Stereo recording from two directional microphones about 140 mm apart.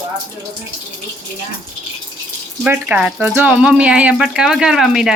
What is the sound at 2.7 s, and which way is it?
Speech, 10° right (ahead or behind).